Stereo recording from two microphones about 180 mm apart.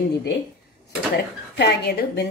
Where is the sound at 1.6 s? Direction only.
65° left (ahead or behind).